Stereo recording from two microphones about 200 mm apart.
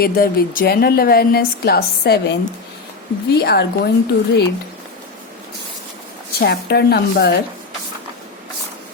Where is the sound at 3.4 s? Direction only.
55° left (ahead or behind).